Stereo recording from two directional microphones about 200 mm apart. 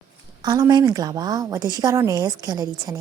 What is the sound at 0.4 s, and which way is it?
A woman's voice, 20° right (ahead or behind).